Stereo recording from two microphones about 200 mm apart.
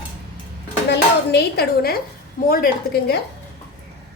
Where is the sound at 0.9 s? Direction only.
55° left (ahead or behind).